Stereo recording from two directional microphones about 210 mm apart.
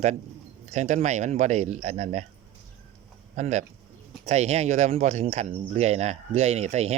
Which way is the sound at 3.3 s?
35° right (ahead or behind).